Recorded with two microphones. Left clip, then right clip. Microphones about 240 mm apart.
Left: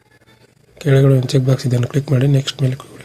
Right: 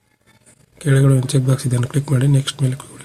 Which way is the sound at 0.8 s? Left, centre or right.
Centre.